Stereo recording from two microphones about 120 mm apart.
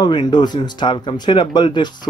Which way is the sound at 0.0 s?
40° left (ahead or behind).